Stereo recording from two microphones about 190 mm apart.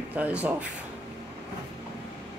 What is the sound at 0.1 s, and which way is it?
Speech, 5° right (ahead or behind).